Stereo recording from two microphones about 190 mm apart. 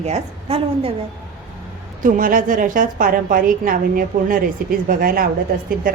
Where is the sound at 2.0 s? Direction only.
45° right (ahead or behind).